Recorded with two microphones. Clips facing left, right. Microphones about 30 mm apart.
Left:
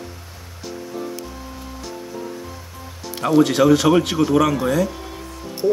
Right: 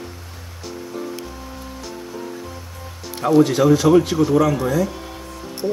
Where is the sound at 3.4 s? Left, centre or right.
Left.